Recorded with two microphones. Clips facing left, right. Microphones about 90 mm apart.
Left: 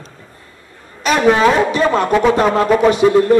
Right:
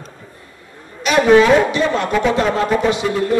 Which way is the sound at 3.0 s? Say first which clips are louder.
Left 9 dB; 35° left (ahead or behind).